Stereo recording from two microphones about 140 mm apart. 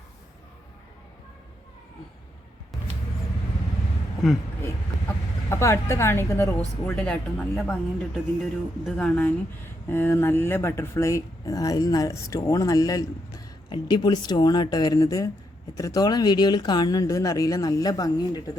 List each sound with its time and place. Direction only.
2.7 s music: centre (ahead or behind)
4.2 s speech: centre (ahead or behind)
4.6 s chicken: 20° left (ahead or behind)
6.9 s speech: 5° left (ahead or behind); by 18.5 s 25° left (ahead or behind)